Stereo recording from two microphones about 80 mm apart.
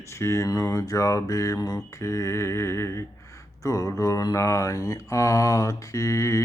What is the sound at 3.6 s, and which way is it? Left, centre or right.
Mantra, left.